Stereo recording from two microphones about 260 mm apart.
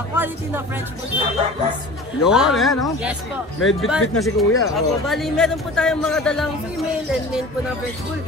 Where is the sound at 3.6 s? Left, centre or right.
Left.